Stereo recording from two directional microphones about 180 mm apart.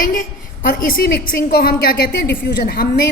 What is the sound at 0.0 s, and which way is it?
A woman's voice, 50° left (ahead or behind).